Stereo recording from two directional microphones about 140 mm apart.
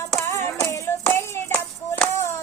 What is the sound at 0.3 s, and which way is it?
Music, 20° left (ahead or behind).